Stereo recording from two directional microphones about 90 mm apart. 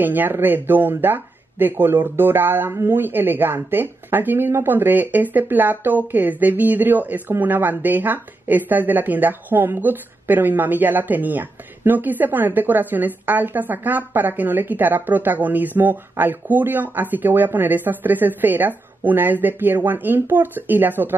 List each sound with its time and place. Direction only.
0.0 s speech: 20° right (ahead or behind)